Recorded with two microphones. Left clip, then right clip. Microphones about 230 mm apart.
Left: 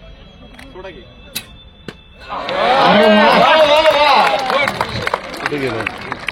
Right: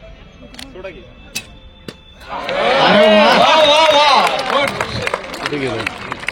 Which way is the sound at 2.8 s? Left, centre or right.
Right.